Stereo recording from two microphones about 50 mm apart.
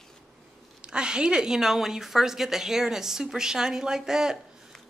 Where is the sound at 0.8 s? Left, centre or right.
Centre.